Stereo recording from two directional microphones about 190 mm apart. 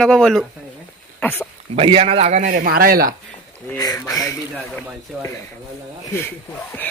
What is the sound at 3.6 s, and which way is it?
Speech, 20° left (ahead or behind).